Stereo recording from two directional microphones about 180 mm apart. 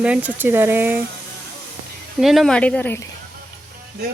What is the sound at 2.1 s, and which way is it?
Speech, centre (ahead or behind).